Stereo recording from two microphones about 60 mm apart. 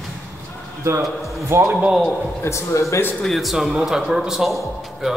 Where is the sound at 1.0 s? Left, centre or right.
Centre.